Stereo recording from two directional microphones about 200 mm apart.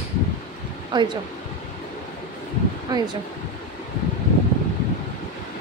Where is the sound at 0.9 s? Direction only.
20° right (ahead or behind).